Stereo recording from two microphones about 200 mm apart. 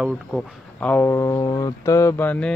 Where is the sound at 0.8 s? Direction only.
10° left (ahead or behind).